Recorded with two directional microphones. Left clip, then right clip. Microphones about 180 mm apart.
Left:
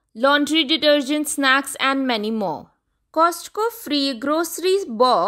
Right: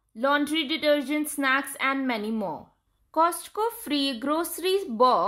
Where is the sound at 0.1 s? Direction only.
45° left (ahead or behind).